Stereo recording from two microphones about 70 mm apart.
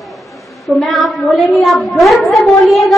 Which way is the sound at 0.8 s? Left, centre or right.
Centre.